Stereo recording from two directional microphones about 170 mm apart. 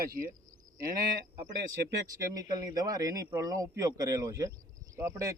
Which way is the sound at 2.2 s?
20° right (ahead or behind).